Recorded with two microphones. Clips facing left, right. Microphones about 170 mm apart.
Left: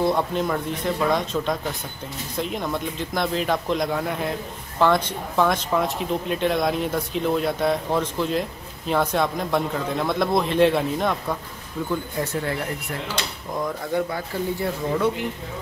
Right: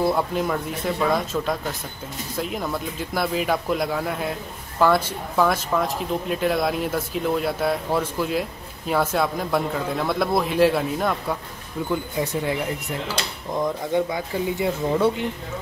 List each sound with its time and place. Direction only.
0.0 s speech: 5° right (ahead or behind)
11.9 s speech: 15° right (ahead or behind)
13.9 s speech: 15° right (ahead or behind)